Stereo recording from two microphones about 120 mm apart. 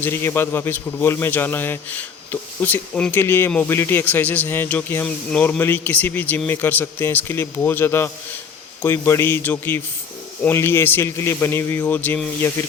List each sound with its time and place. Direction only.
0.0 s a man's voice: 20° left (ahead or behind)